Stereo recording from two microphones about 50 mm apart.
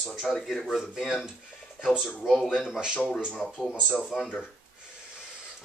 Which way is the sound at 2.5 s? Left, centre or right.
Centre.